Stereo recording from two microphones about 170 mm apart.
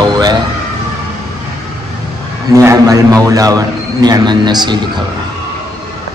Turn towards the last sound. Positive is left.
turn(degrees=-25)  # may be behind; listen again after turning